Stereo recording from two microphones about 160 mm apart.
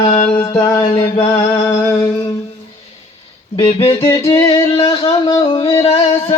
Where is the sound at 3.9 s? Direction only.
30° left (ahead or behind).